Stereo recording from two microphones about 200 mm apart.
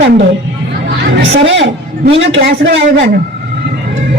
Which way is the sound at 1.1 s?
65° right (ahead or behind).